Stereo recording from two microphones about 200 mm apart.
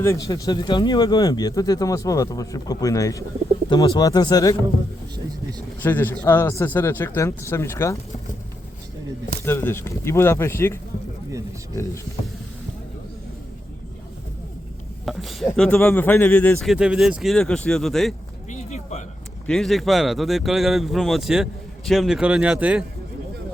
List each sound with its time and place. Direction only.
0.0 s speech: 15° left (ahead or behind)
5.1 s vehicle: 20° right (ahead or behind)
5.8 s speech: 10° left (ahead or behind)
9.5 s speech: 10° left (ahead or behind)
15.0 s a sound: centre (ahead or behind)
15.4 s speech: 5° left (ahead or behind)
18.5 s a sound: 35° left (ahead or behind)
19.5 s speech: centre (ahead or behind)